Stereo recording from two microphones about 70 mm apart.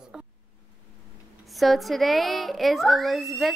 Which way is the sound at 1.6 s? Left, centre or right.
Centre.